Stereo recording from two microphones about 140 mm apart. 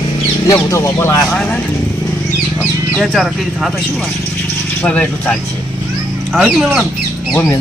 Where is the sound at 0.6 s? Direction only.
20° left (ahead or behind).